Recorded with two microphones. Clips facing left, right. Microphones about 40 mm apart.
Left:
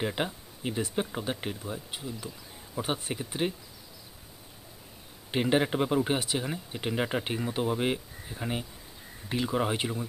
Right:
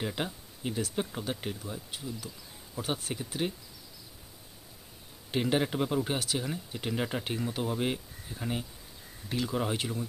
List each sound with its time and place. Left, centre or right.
0.0 s speech: centre
5.3 s speech: centre